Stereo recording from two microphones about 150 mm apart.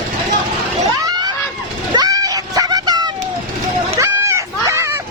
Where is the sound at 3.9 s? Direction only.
20° right (ahead or behind).